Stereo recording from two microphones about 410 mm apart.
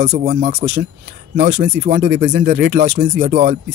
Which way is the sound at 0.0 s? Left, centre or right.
Right.